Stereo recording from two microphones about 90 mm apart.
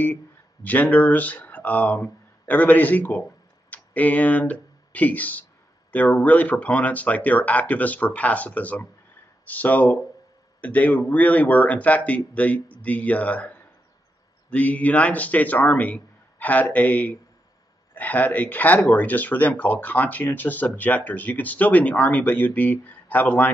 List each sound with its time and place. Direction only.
0.7 s speech: 20° left (ahead or behind)